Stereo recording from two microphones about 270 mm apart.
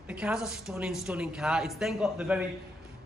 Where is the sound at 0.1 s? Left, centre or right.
Centre.